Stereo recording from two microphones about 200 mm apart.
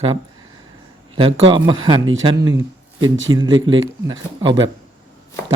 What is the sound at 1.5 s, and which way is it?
Mantra, 25° right (ahead or behind).